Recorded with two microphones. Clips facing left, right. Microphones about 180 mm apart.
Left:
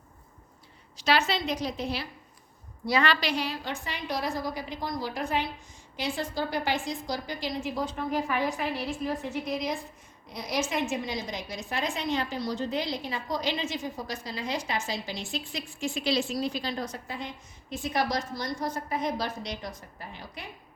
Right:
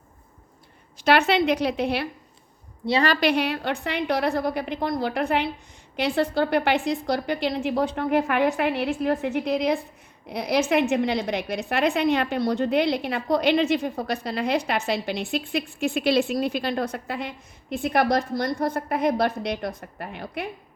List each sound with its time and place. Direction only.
0.9 s a woman's voice: 55° right (ahead or behind)
2.8 s a woman's voice: 25° right (ahead or behind)
3.1 s a woman's voice: 55° right (ahead or behind)